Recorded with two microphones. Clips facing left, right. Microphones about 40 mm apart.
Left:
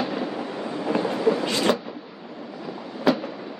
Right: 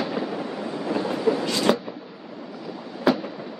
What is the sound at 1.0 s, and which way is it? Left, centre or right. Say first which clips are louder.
Train: left 1 dB; centre.